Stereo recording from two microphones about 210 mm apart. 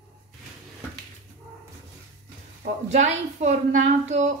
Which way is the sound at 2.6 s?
35° right (ahead or behind).